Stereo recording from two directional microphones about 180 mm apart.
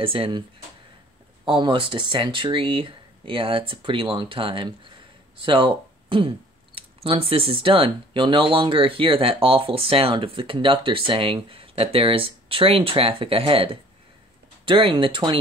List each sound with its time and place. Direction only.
0.0 s speech: 30° right (ahead or behind)
1.4 s speech: 25° right (ahead or behind)